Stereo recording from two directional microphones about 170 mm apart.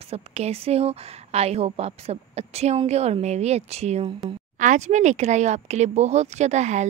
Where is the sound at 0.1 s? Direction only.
40° right (ahead or behind).